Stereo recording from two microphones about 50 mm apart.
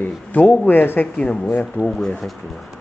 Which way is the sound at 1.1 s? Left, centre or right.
Left.